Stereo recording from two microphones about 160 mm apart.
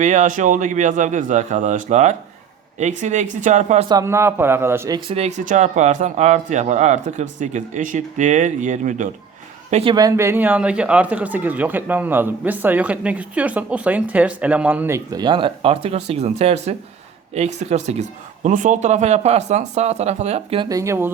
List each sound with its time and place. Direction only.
0.0 s speech: 50° right (ahead or behind)
3.8 s speech: 20° right (ahead or behind)
5.0 s a man's voice: 40° right (ahead or behind)
9.9 s speech: 20° right (ahead or behind); by 20.7 s 40° right (ahead or behind)
20.7 s speech: 20° right (ahead or behind)